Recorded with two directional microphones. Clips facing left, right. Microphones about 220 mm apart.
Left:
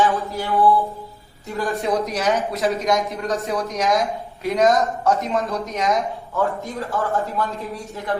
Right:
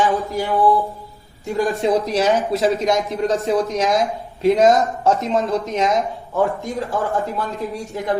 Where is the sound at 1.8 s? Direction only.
30° right (ahead or behind).